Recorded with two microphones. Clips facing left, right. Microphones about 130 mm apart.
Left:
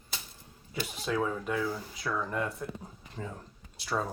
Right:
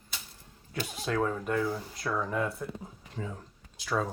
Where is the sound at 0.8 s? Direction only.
Centre (ahead or behind).